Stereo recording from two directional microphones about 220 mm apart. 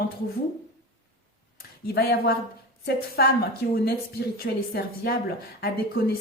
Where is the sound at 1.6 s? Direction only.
45° left (ahead or behind).